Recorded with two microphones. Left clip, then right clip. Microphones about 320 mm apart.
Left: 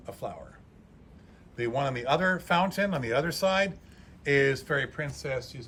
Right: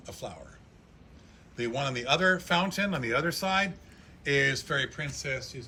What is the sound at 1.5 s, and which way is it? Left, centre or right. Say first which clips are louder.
Speech: left 2 dB; left.